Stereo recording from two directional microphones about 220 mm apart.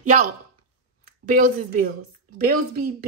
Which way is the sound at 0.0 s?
35° right (ahead or behind).